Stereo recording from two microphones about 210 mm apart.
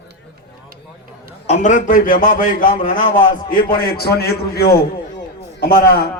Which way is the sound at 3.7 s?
45° left (ahead or behind).